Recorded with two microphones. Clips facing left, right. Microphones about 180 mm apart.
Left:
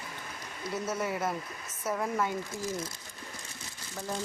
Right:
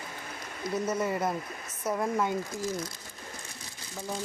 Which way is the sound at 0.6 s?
30° left (ahead or behind).